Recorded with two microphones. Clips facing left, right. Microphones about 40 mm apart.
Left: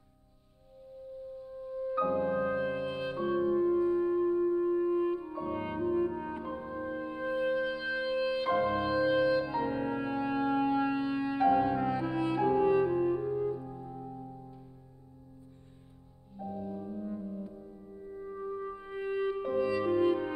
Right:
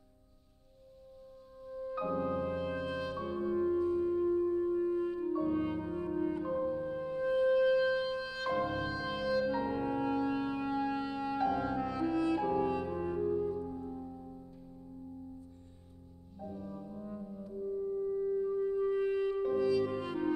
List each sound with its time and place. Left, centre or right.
1.7 s music: left
16.3 s music: left